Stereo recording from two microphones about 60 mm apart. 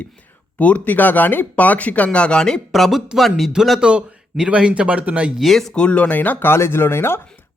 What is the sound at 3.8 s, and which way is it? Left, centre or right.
Speech, centre.